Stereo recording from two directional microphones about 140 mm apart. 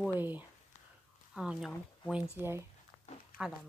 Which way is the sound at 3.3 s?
90° left.